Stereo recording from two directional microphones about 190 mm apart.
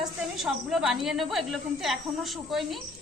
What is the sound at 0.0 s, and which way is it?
A woman's voice, centre (ahead or behind).